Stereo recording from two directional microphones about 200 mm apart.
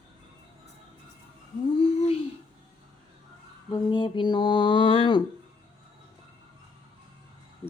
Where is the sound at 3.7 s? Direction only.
20° left (ahead or behind).